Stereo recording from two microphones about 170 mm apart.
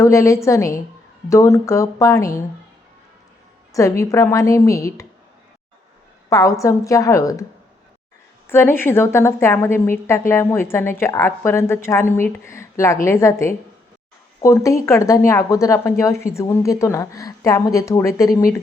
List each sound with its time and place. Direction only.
0.0 s a woman's voice: 15° left (ahead or behind)
3.7 s speech: 20° left (ahead or behind)
6.3 s speech: 20° left (ahead or behind)
8.4 s a woman's voice: 15° left (ahead or behind)
14.4 s a woman's voice: 20° left (ahead or behind)